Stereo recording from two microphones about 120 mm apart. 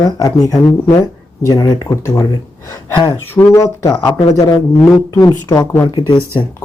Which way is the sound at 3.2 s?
20° left (ahead or behind).